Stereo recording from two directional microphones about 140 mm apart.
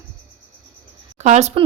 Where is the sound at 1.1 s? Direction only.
55° right (ahead or behind).